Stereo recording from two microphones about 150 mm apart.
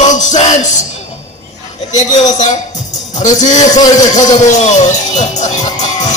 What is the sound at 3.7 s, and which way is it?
Speech, 25° left (ahead or behind).